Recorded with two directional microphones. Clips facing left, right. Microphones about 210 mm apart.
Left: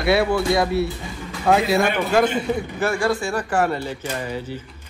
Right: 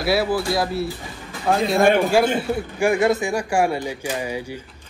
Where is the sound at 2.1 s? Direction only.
10° right (ahead or behind).